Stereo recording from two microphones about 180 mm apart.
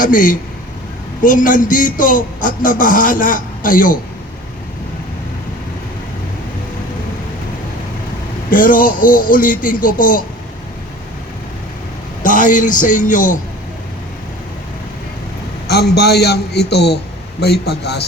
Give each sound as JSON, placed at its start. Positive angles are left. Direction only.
{"t": 0.0, "sound": "speech", "side_deg": 50}
{"t": 8.4, "sound": "speech", "side_deg": 50}
{"t": 12.2, "sound": "speech", "side_deg": 45}
{"t": 15.6, "sound": "a man's voice", "side_deg": 65}